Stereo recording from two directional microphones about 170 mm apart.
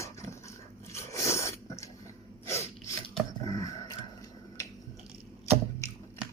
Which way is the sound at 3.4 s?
20° left (ahead or behind).